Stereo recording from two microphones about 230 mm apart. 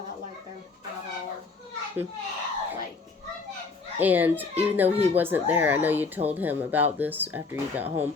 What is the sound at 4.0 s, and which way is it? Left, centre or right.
Speech, centre.